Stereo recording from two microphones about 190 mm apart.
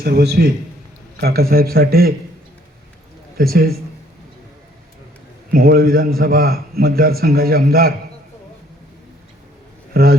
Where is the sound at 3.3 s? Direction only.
50° right (ahead or behind).